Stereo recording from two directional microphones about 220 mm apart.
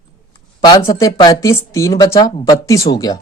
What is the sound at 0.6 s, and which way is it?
Speech, 20° left (ahead or behind).